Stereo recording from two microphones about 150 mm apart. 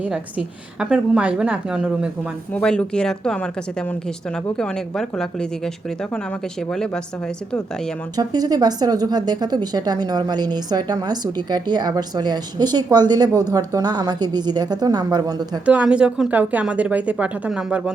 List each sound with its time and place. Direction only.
0.0 s a woman's voice: 5° right (ahead or behind)
2.5 s speech: 5° left (ahead or behind)
8.1 s speech: 25° right (ahead or behind)
15.6 s a woman's voice: 10° right (ahead or behind)